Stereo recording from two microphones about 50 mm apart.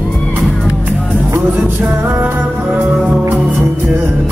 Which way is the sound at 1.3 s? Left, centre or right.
Right.